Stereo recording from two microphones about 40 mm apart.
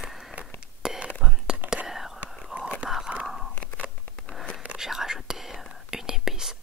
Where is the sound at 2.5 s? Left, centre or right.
Right.